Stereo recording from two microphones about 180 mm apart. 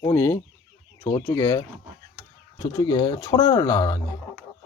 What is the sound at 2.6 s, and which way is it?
Speech, 20° left (ahead or behind).